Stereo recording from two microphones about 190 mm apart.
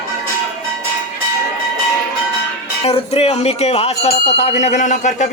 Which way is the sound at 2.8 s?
30° left (ahead or behind).